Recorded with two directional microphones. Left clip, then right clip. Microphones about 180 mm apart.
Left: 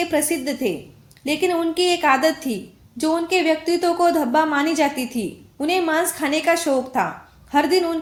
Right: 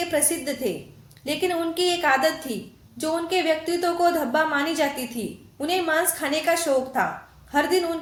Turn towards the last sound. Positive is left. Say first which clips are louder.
# left 4 dB
turn(degrees=35)  # may be behind; listen again after turning